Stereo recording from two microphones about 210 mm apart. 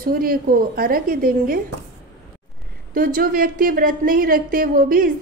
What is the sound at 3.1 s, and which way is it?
Speech, 40° right (ahead or behind).